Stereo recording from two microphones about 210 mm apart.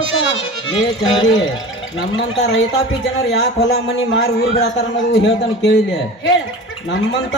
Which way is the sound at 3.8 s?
60° left (ahead or behind).